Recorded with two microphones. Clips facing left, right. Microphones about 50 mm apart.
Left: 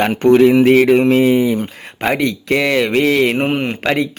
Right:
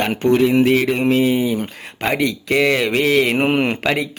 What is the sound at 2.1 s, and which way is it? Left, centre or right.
Mantra, centre.